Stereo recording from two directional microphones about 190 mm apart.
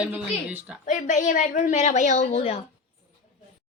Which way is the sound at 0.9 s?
40° left (ahead or behind).